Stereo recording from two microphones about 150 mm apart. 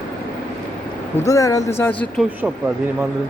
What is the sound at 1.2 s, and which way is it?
Speech, 20° left (ahead or behind).